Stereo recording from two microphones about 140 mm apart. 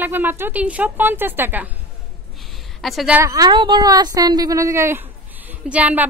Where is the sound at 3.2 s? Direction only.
25° right (ahead or behind).